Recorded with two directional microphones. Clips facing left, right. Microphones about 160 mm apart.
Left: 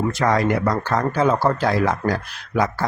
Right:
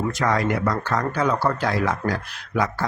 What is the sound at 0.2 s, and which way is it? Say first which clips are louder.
Speech: left 3 dB; 35° left (ahead or behind).